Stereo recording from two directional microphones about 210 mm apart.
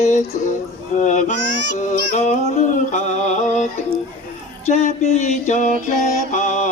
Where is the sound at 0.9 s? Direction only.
35° left (ahead or behind).